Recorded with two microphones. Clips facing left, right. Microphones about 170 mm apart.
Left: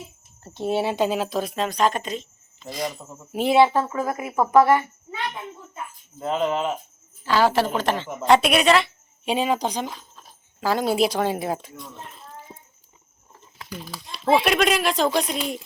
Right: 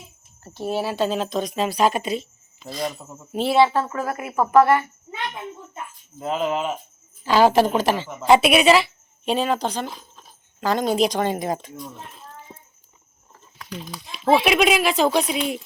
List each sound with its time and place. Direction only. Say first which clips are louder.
0.4 s speech: left 2 dB; 20° left (ahead or behind); by 2.6 s 10° right (ahead or behind)
2.6 s speech: right 1 dB; 15° left (ahead or behind)
5.1 s speech: even; 20° right (ahead or behind)
6.1 s speech: even; 5° right (ahead or behind)
7.3 s speech: right 4 dB; 15° right (ahead or behind)
9.2 s speech: right 1 dB; 10° left (ahead or behind)
9.9 s dog: even; 10° right (ahead or behind)
10.6 s speech: right 1 dB; 5° left (ahead or behind)
13.7 s speech: right 2 dB; 5° left (ahead or behind)